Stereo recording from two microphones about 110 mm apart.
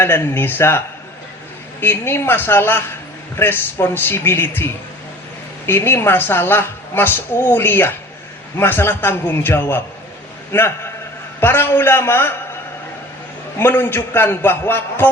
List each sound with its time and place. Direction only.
0.0 s a woman's voice: 20° left (ahead or behind)
1.8 s a woman's voice: 20° left (ahead or behind)
13.6 s a woman's voice: 20° left (ahead or behind)